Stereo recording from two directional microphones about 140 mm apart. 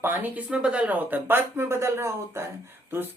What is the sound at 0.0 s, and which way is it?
Speech, 15° right (ahead or behind).